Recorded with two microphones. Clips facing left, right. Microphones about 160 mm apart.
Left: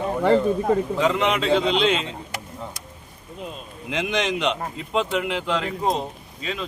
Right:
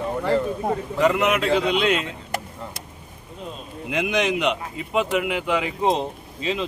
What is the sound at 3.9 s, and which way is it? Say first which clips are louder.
A man's voice: right 2 dB; 5° right (ahead or behind).